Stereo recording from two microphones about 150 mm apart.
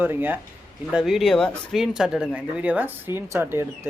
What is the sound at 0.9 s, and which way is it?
Speech, centre (ahead or behind).